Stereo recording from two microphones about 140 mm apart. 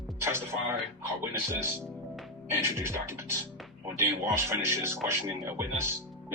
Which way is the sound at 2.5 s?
20° right (ahead or behind).